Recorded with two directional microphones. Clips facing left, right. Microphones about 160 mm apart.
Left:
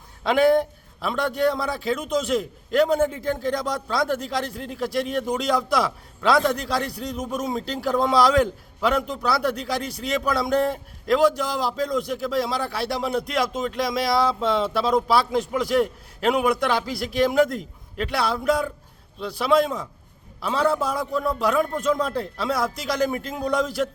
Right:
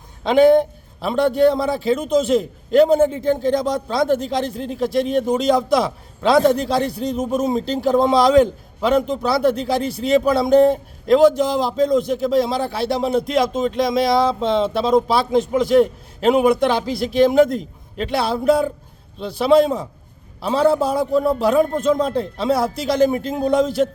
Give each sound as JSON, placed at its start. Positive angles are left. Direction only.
{"t": 0.2, "sound": "a man's voice", "side_deg": -25}